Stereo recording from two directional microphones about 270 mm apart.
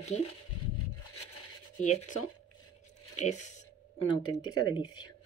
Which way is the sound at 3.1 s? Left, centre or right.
Left.